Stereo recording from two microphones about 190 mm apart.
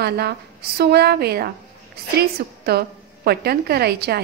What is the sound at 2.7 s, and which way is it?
A woman's voice, 55° right (ahead or behind).